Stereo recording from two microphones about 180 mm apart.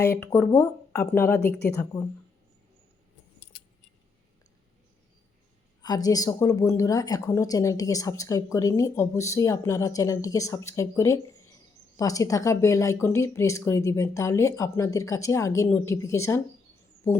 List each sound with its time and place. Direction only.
0.0 s speech: 15° left (ahead or behind)
5.8 s a woman's voice: 20° left (ahead or behind)